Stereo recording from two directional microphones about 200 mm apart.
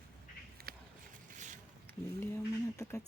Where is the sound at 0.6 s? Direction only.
50° right (ahead or behind).